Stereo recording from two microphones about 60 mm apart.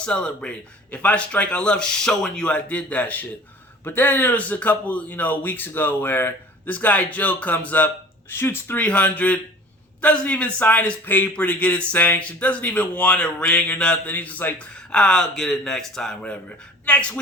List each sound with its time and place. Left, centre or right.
0.0 s a man's voice: centre
8.3 s speech: left
8.8 s a man's voice: left
11.3 s speech: left
14.0 s speech: left
14.9 s a man's voice: centre
16.8 s speech: left